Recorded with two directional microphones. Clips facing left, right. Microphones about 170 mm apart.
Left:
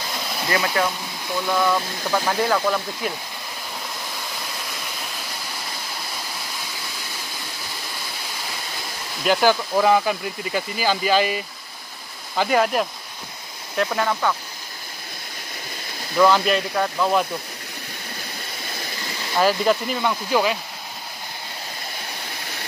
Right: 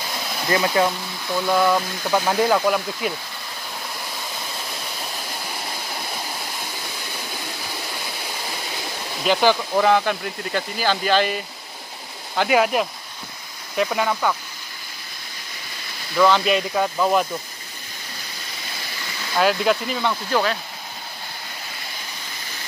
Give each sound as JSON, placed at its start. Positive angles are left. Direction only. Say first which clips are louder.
{"t": 0.5, "sound": "speech", "louder": "right 3 dB", "side_deg": -20}
{"t": 9.2, "sound": "speech", "louder": "even", "side_deg": 5}
{"t": 16.2, "sound": "speech", "louder": "even", "side_deg": 5}
{"t": 16.4, "sound": "speech", "louder": "right 1 dB", "side_deg": -10}
{"t": 19.3, "sound": "speech", "louder": "even", "side_deg": 0}